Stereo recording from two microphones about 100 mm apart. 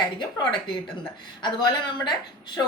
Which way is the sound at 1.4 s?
45° left (ahead or behind).